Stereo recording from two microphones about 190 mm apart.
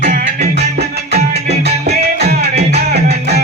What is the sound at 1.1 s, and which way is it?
Music, 60° right (ahead or behind).